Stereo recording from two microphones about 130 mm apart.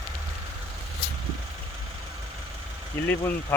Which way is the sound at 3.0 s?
20° left (ahead or behind).